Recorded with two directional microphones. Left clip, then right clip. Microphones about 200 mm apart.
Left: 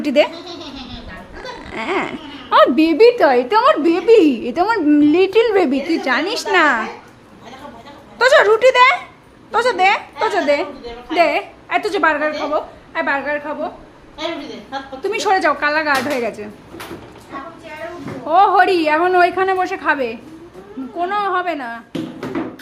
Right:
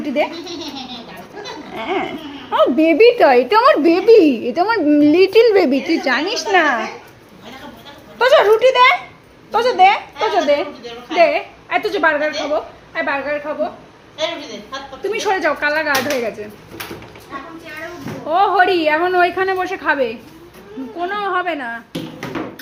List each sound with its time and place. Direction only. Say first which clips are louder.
0.0 s speech: left 4 dB; 25° left (ahead or behind)
1.7 s speech: left 1 dB; 20° left (ahead or behind)
2.7 s a woman's voice: right 1 dB; 5° right (ahead or behind)
6.5 s speech: left 1 dB; 10° left (ahead or behind)
8.2 s a woman's voice: even; 5° left (ahead or behind)
15.0 s a woman's voice: left 2 dB; centre (ahead or behind)
18.3 s a woman's voice: left 2 dB; 5° left (ahead or behind)